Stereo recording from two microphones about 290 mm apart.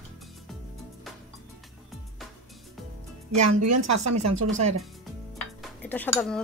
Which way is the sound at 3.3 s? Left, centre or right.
Right.